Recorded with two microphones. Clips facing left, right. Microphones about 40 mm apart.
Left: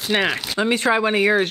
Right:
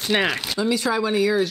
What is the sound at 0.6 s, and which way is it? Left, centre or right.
Speech, left.